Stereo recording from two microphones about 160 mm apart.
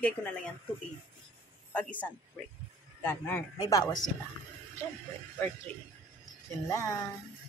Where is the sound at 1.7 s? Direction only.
10° left (ahead or behind).